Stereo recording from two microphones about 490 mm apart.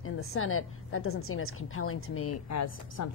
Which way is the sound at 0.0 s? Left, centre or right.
Left.